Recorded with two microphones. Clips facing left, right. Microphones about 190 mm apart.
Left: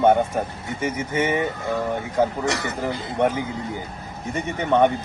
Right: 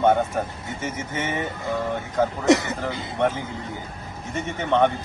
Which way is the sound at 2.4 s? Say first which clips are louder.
Right 5 dB; 20° right (ahead or behind).